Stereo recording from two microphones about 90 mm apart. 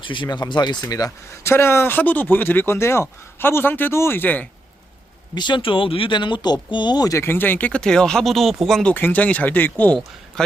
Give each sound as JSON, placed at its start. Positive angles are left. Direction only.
{"t": 0.0, "sound": "speech", "side_deg": 60}
{"t": 1.5, "sound": "speech", "side_deg": 30}
{"t": 5.3, "sound": "speech", "side_deg": 55}
{"t": 7.1, "sound": "speech", "side_deg": 25}
{"t": 7.7, "sound": "speech", "side_deg": 5}
{"t": 8.9, "sound": "speech", "side_deg": 20}
{"t": 10.3, "sound": "speech", "side_deg": 5}